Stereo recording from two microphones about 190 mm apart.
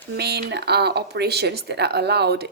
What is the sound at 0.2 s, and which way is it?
Speech, 60° right (ahead or behind).